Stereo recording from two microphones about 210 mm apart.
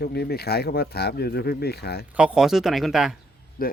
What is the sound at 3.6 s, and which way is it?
Speech, 45° left (ahead or behind).